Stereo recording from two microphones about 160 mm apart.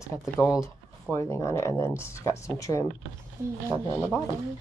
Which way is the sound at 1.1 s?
15° left (ahead or behind).